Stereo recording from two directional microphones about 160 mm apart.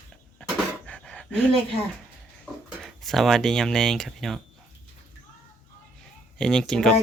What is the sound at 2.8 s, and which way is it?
Speech, centre (ahead or behind).